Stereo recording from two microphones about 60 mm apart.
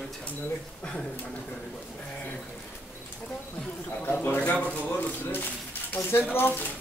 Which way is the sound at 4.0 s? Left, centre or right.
Left.